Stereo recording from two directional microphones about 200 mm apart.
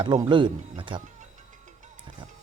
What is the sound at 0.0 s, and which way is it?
Speech, 20° right (ahead or behind).